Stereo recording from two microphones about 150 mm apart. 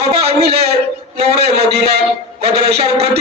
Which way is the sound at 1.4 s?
90° right.